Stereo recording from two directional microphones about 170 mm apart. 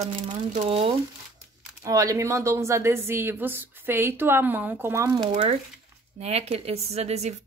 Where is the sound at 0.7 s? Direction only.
30° right (ahead or behind).